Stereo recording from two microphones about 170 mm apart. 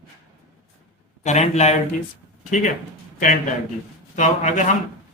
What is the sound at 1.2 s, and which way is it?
Speech, 40° left (ahead or behind).